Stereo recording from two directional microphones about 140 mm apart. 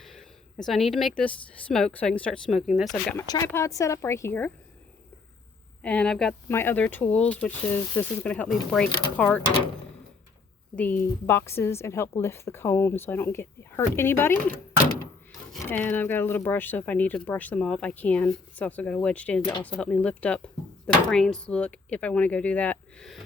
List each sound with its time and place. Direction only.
0.0 s speech: centre (ahead or behind)
3.2 s speech: 20° left (ahead or behind)
5.8 s a woman's voice: 10° left (ahead or behind)
6.5 s a woman's voice: 15° left (ahead or behind)
10.8 s a woman's voice: 15° left (ahead or behind)
15.8 s a woman's voice: 15° left (ahead or behind)